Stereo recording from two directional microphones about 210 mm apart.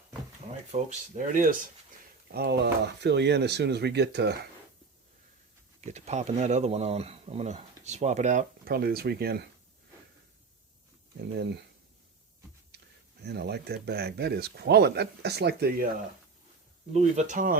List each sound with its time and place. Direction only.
0.7 s speech: 35° right (ahead or behind); by 4.4 s 55° right (ahead or behind)
5.8 s speech: 35° right (ahead or behind); by 9.4 s 50° right (ahead or behind)
12.7 s a sound: 55° right (ahead or behind)
13.2 s speech: 50° right (ahead or behind)
16.9 s speech: 35° right (ahead or behind)